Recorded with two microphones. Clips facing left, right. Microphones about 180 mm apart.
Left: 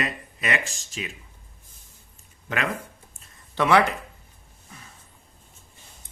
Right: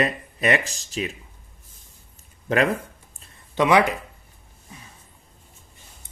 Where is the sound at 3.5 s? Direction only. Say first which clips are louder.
Right 2 dB; 15° right (ahead or behind).